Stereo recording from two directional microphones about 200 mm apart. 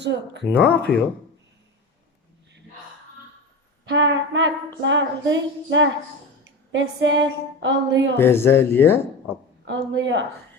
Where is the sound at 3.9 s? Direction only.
65° right (ahead or behind).